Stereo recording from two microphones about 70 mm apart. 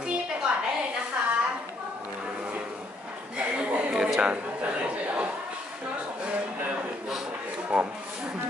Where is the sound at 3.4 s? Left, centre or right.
Centre.